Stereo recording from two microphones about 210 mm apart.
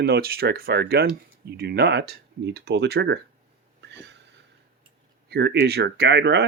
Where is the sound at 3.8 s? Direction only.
55° right (ahead or behind).